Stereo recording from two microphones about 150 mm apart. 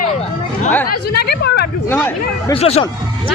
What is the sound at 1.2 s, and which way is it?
Chatter, 90° left.